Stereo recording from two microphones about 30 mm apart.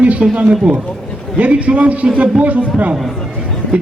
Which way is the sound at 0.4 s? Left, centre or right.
Centre.